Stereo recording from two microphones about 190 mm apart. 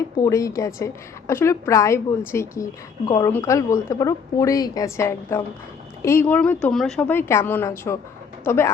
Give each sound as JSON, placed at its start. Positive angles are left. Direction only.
{"t": 0.2, "sound": "a woman's voice", "side_deg": 15}